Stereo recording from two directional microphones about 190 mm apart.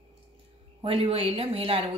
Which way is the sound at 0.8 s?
30° right (ahead or behind).